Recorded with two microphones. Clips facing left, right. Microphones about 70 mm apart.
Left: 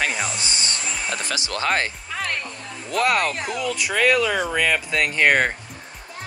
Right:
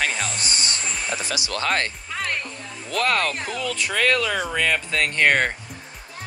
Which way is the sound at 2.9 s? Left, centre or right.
Centre.